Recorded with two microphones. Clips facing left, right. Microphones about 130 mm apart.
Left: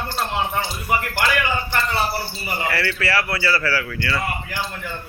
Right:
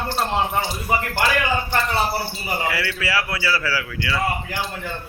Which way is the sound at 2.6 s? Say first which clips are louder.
Left 4 dB; 10° right (ahead or behind).